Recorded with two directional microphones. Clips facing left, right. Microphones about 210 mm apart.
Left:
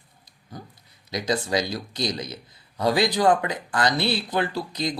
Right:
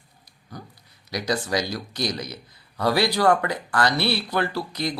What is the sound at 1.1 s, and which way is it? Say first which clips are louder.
Speech: left 1 dB; 20° left (ahead or behind).